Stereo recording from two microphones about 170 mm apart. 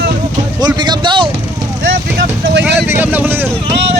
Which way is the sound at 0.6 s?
25° right (ahead or behind).